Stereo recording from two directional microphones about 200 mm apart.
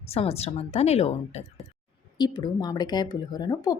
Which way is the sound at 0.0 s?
30° left (ahead or behind).